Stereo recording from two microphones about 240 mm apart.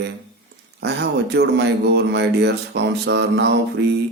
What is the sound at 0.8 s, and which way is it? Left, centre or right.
Speech, right.